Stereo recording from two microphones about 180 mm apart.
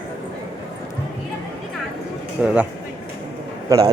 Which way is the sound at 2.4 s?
5° right (ahead or behind).